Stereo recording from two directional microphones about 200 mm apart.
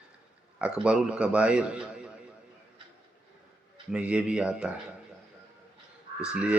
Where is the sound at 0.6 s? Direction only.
5° right (ahead or behind).